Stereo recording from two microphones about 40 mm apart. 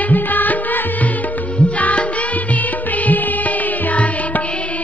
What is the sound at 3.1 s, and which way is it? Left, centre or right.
Music, left.